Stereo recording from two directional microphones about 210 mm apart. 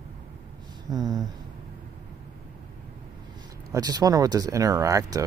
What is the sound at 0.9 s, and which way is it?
Speech, 20° right (ahead or behind).